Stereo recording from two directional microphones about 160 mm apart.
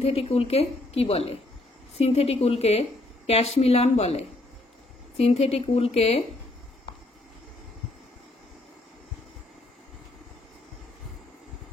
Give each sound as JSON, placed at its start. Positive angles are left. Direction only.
{"t": 0.0, "sound": "speech", "side_deg": 40}